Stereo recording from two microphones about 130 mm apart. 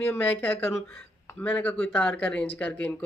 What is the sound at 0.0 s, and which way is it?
Speech, 15° left (ahead or behind).